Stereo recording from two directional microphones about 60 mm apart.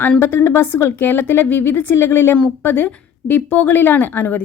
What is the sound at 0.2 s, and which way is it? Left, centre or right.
A woman's voice, left.